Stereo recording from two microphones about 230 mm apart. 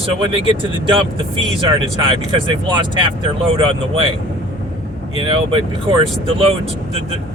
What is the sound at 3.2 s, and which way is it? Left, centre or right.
Speech, right.